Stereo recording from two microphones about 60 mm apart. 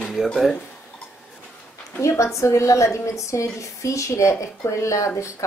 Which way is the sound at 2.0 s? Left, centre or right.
Left.